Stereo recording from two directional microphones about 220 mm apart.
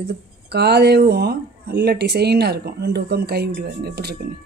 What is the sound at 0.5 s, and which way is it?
Speech, 50° right (ahead or behind).